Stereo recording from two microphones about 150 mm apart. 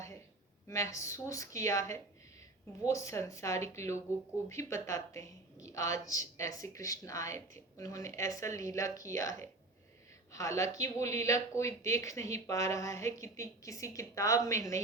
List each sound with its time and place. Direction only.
0.7 s speech: 20° left (ahead or behind)
10.3 s speech: 20° left (ahead or behind)